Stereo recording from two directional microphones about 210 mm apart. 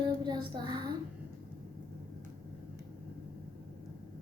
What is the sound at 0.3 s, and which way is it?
Child singing, 20° right (ahead or behind).